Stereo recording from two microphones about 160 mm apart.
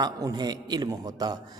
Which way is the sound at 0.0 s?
25° right (ahead or behind).